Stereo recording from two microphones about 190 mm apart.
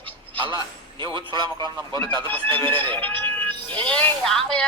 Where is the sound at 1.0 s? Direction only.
25° right (ahead or behind).